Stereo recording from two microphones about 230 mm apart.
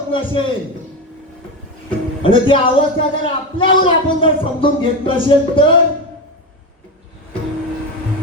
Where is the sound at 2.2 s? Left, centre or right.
Left.